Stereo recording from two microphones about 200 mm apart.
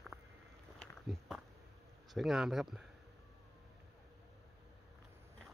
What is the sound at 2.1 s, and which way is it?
Speech, centre (ahead or behind).